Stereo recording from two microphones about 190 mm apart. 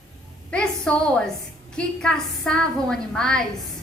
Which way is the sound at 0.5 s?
5° left (ahead or behind).